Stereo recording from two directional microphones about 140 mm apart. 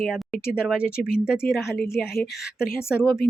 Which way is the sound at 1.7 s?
90° left.